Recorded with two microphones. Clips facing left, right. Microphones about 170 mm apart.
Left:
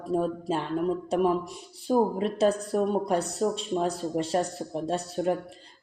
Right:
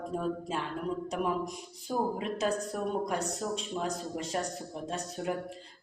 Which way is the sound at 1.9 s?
30° left (ahead or behind).